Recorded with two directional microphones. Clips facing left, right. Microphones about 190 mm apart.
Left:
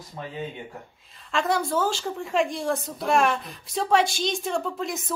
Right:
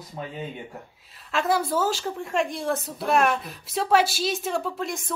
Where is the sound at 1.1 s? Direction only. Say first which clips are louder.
Right 1 dB; 5° right (ahead or behind).